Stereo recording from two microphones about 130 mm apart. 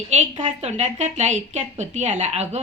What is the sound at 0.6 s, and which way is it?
A woman's voice, 65° right (ahead or behind).